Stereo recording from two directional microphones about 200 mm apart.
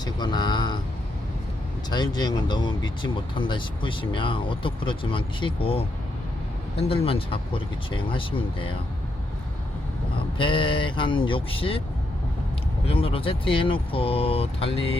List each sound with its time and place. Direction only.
0.0 s speech: 20° left (ahead or behind)
1.9 s speech: 20° left (ahead or behind)
10.3 s speech: 25° left (ahead or behind)
12.8 s speech: 30° left (ahead or behind)